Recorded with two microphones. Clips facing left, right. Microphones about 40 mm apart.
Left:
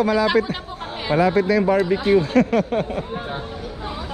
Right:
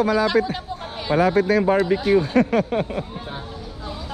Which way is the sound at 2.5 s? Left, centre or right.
Centre.